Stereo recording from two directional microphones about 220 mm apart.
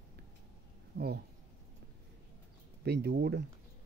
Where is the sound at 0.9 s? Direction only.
50° right (ahead or behind).